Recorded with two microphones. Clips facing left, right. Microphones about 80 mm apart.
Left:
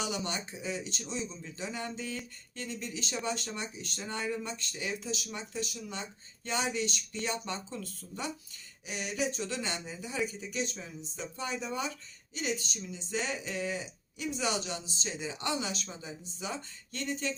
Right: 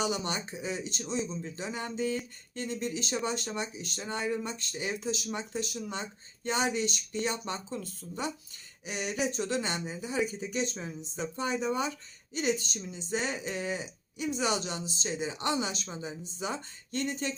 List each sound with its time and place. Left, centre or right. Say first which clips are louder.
0.0 s speech: right 3 dB; right